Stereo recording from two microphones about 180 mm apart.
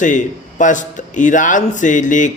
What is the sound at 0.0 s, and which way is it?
A man's voice, 45° left (ahead or behind).